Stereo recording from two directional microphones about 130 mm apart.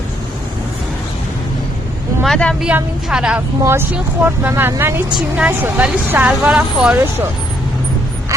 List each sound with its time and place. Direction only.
2.2 s speech: 5° left (ahead or behind)
2.6 s speech: 5° right (ahead or behind)
3.6 s speech: 20° right (ahead or behind)